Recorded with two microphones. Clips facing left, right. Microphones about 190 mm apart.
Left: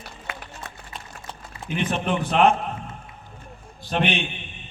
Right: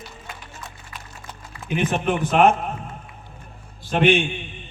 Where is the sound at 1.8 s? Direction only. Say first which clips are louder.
Right 2 dB; 50° right (ahead or behind).